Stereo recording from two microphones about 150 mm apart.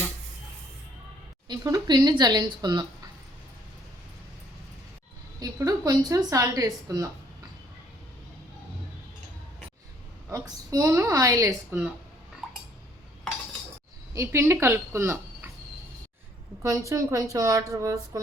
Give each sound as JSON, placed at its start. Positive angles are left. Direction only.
{"t": 1.5, "sound": "a woman's voice", "side_deg": -25}
{"t": 5.4, "sound": "a woman's voice", "side_deg": -25}
{"t": 10.2, "sound": "a woman's voice", "side_deg": -20}
{"t": 14.1, "sound": "speech", "side_deg": -20}
{"t": 16.6, "sound": "a woman's voice", "side_deg": -20}